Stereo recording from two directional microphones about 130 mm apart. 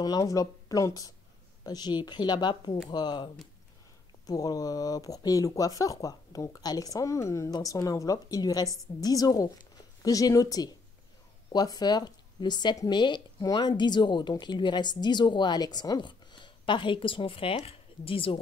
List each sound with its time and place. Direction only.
0.0 s speech: 30° left (ahead or behind)
4.3 s speech: 30° left (ahead or behind); by 18.4 s 45° left (ahead or behind)